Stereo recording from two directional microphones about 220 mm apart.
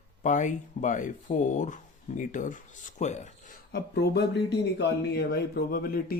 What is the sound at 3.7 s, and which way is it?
Speech, 50° left (ahead or behind).